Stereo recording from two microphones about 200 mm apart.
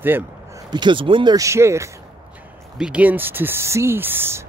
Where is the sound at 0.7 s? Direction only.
25° right (ahead or behind).